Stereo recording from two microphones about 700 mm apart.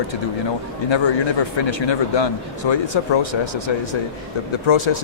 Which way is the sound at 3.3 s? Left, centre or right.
Left.